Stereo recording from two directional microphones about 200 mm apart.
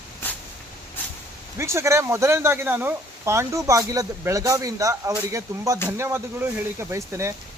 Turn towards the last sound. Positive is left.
turn(degrees=-15)  # may be behind; listen again after turning